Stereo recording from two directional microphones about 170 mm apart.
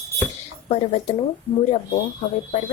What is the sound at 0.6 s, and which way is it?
Speech, 35° left (ahead or behind).